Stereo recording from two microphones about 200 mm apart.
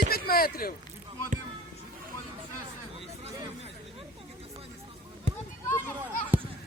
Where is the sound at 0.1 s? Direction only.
50° left (ahead or behind).